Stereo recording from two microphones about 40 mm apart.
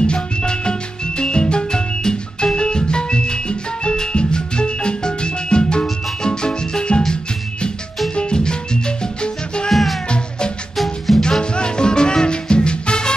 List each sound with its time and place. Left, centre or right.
0.0 s music: left
8.1 s music: left
9.7 s music: centre
10.0 s music: left
10.8 s music: centre
11.5 s music: left